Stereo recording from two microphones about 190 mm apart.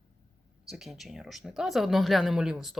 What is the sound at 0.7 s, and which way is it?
Speech, centre (ahead or behind).